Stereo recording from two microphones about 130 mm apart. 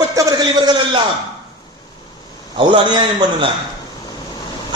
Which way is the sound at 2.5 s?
40° right (ahead or behind).